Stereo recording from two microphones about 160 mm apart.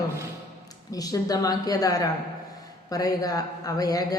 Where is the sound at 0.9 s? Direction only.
25° left (ahead or behind).